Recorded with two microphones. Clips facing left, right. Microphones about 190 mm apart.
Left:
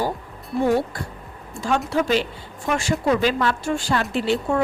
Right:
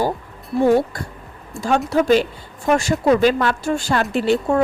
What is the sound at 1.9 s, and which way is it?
A woman's voice, 45° right (ahead or behind).